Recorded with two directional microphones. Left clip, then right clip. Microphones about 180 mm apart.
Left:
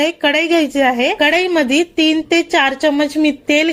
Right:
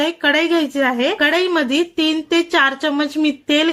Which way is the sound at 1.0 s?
15° left (ahead or behind).